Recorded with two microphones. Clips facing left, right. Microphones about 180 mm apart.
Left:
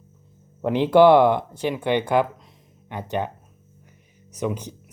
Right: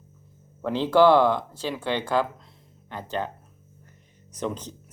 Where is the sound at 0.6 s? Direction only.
20° left (ahead or behind).